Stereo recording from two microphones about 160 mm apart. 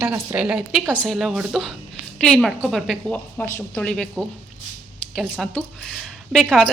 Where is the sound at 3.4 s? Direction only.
15° left (ahead or behind).